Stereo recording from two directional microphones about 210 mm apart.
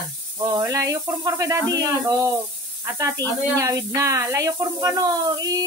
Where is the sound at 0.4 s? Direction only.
15° right (ahead or behind).